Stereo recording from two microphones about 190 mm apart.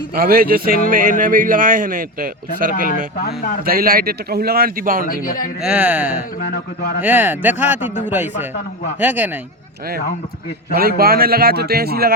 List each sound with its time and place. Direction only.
0.1 s a man's voice: 50° right (ahead or behind)
3.2 s a man's voice: 55° left (ahead or behind)
3.6 s a man's voice: 50° right (ahead or behind)
5.2 s speech: 50° left (ahead or behind)
5.6 s speech: 5° right (ahead or behind)
6.1 s a man's voice: 60° left (ahead or behind)
7.0 s speech: 10° right (ahead or behind)
7.8 s a man's voice: 40° left (ahead or behind)
8.1 s speech: 10° right (ahead or behind)
10.8 s a man's voice: 50° right (ahead or behind)